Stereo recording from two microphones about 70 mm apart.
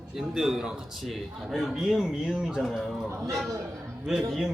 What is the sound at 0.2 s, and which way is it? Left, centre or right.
A man's voice, centre.